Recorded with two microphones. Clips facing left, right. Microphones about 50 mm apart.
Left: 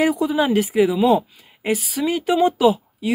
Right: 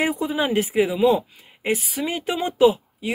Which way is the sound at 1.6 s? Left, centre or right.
Centre.